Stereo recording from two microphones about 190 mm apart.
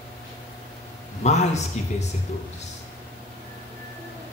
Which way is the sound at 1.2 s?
35° left (ahead or behind).